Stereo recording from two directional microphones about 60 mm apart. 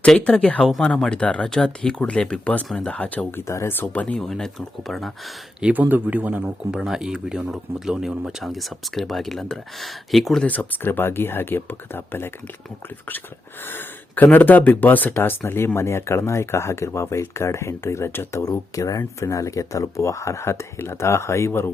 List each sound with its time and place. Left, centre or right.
0.0 s speech: centre
3.4 s speech: left
3.9 s speech: left
4.2 s speech: centre
5.7 s a man's voice: right
6.7 s speech: centre
10.4 s speech: left
13.7 s a sound: left
14.3 s speech: left